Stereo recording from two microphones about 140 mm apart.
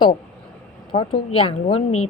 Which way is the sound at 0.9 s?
40° left (ahead or behind).